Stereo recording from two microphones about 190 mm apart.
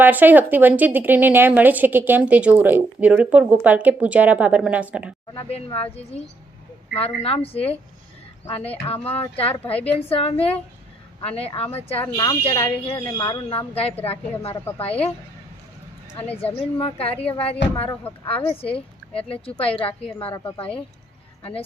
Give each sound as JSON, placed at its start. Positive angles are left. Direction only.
{"t": 0.0, "sound": "speech", "side_deg": -10}
{"t": 5.3, "sound": "speech", "side_deg": 30}
{"t": 12.0, "sound": "speech", "side_deg": 20}
{"t": 16.4, "sound": "speech", "side_deg": 30}